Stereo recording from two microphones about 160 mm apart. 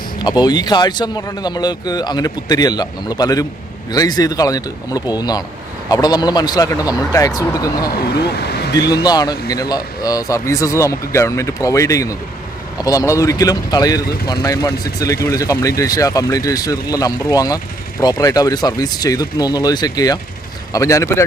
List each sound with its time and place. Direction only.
0.2 s speech: 25° left (ahead or behind)
8.2 s speech: 90° left
9.0 s speech: 25° left (ahead or behind)